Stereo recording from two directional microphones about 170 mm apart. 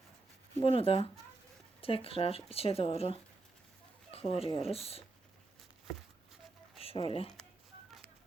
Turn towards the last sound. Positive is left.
turn(degrees=35)  # may be behind; listen again after turning